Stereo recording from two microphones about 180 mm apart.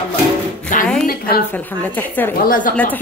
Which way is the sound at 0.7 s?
45° left (ahead or behind).